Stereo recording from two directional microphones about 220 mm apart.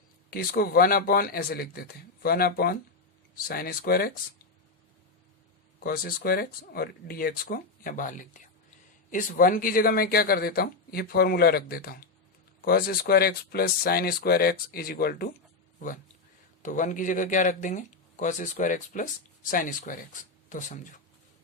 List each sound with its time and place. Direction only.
0.3 s speech: 45° left (ahead or behind)
5.8 s speech: 40° left (ahead or behind)